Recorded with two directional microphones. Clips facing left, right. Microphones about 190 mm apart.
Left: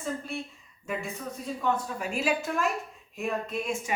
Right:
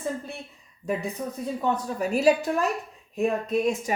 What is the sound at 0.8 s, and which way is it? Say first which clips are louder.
Speech: right 5 dB; 35° right (ahead or behind).